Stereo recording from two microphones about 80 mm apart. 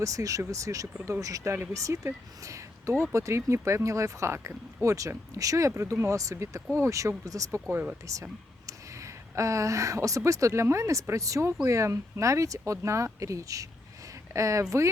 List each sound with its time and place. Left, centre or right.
0.0 s speech: right